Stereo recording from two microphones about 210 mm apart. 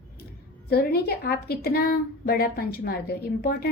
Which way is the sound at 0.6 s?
45° left (ahead or behind).